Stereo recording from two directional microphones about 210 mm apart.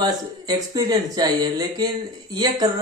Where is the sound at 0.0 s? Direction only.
20° right (ahead or behind).